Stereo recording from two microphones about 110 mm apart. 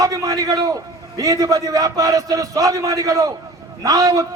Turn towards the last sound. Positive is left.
turn(degrees=-30)  # may be behind; listen again after turning